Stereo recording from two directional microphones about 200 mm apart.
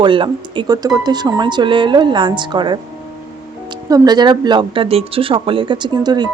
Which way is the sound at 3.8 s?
20° right (ahead or behind).